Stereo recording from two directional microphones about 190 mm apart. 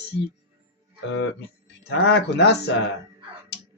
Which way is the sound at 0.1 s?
70° left (ahead or behind).